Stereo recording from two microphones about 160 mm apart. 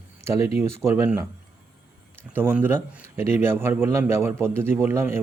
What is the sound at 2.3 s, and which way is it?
A man's voice, 15° right (ahead or behind).